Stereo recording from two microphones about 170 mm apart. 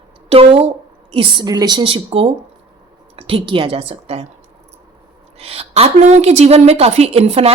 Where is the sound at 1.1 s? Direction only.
25° right (ahead or behind).